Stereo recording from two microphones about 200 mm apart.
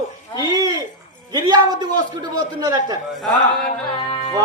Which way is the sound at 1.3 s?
20° right (ahead or behind).